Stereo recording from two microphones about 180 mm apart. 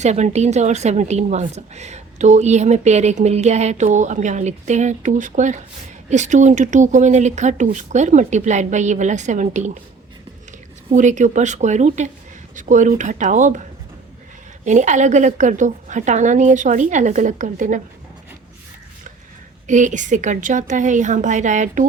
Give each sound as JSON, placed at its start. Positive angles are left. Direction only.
{"t": 0.0, "sound": "a woman's voice", "side_deg": -40}
{"t": 10.9, "sound": "a woman's voice", "side_deg": -45}
{"t": 14.6, "sound": "a woman's voice", "side_deg": -40}
{"t": 19.6, "sound": "a woman's voice", "side_deg": -45}